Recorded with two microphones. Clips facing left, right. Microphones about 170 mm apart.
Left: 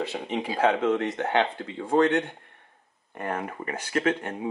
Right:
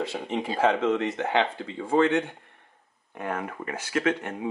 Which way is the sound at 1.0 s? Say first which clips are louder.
Even; centre (ahead or behind).